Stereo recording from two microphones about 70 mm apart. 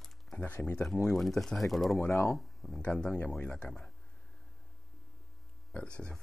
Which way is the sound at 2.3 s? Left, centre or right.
Centre.